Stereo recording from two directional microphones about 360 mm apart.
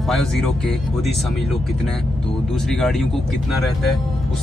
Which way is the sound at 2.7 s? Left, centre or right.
Centre.